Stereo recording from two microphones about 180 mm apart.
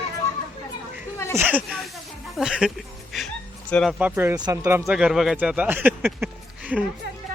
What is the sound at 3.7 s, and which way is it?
Speech, centre (ahead or behind).